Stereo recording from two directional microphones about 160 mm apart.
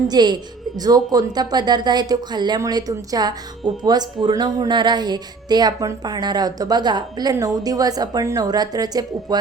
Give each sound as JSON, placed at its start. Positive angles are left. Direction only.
{"t": 0.1, "sound": "speech", "side_deg": -25}